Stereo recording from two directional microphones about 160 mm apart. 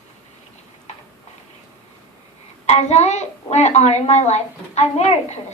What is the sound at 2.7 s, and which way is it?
A woman's voice, 45° left (ahead or behind).